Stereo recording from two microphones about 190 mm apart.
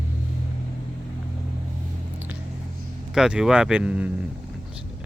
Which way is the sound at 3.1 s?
5° right (ahead or behind).